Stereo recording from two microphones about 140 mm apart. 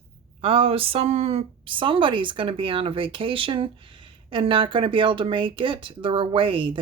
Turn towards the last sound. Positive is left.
turn(degrees=-35)  # may be behind; listen again after turning